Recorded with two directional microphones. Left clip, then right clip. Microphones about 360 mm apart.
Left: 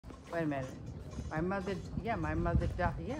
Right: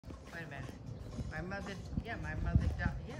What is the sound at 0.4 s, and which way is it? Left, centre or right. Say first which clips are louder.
Speech: left 12 dB; centre.